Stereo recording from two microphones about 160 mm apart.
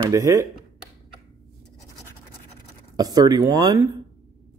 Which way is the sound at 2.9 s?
25° right (ahead or behind).